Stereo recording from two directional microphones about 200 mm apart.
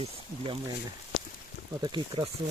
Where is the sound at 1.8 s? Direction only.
25° right (ahead or behind).